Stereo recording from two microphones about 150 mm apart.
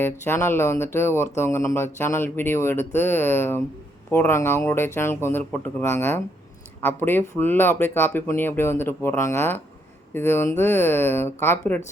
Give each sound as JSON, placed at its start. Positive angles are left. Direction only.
{"t": 0.0, "sound": "speech", "side_deg": 15}